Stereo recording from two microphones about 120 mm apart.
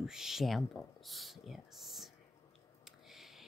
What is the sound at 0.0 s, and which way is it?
Speech, 5° right (ahead or behind).